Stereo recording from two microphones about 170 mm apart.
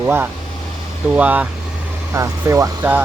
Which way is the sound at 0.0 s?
10° right (ahead or behind).